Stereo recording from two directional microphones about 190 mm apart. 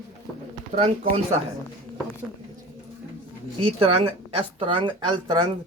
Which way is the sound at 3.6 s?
30° right (ahead or behind).